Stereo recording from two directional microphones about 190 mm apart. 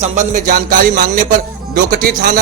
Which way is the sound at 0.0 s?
40° right (ahead or behind).